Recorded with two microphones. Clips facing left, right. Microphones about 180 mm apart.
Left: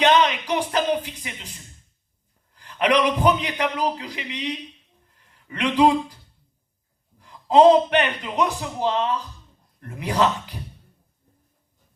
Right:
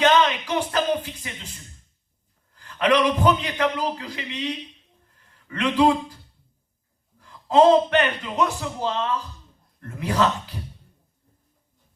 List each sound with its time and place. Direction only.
0.0 s music: 15° left (ahead or behind)
2.6 s a man's voice: 15° left (ahead or behind)
7.2 s a man's voice: 15° left (ahead or behind)